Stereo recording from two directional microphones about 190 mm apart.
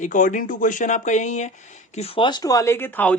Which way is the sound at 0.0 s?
45° left (ahead or behind).